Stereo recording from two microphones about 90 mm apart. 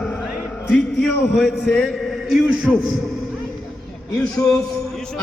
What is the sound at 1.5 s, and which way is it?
Speech, centre (ahead or behind).